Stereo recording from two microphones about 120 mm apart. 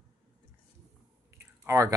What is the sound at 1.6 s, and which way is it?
Speech, 25° right (ahead or behind).